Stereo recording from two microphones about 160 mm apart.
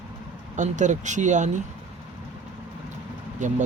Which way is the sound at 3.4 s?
50° right (ahead or behind).